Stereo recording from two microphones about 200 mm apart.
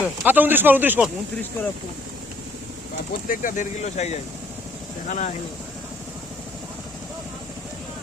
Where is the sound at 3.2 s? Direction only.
40° left (ahead or behind).